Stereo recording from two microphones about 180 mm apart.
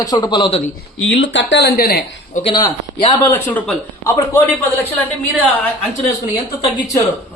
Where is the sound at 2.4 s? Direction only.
25° left (ahead or behind).